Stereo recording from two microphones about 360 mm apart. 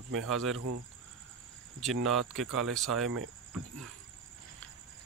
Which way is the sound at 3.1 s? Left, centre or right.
Right.